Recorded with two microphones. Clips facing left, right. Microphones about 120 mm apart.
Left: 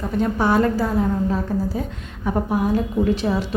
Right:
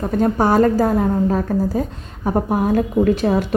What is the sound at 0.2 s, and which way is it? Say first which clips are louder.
A woman's voice: right 3 dB; 40° right (ahead or behind).